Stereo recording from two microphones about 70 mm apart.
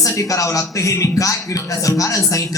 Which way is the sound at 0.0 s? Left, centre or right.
Left.